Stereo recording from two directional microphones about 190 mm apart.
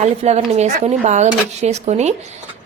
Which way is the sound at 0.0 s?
35° right (ahead or behind).